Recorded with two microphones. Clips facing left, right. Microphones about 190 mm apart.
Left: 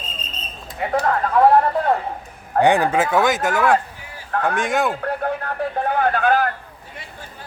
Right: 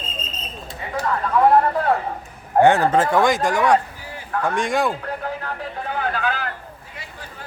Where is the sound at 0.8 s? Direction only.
65° left (ahead or behind).